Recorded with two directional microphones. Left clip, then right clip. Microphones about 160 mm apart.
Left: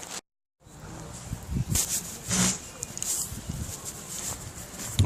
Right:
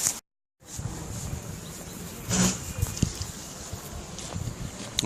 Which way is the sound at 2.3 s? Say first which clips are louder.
Even; 35° left (ahead or behind).